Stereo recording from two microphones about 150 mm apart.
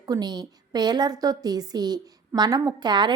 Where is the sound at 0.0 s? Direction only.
25° right (ahead or behind).